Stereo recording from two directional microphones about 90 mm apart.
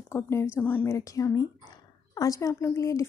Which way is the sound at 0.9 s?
35° left (ahead or behind).